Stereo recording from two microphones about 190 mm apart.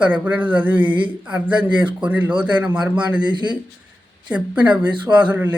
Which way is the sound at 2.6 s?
5° right (ahead or behind).